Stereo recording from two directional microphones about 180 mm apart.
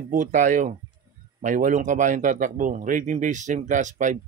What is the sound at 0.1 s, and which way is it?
Speech, 45° right (ahead or behind).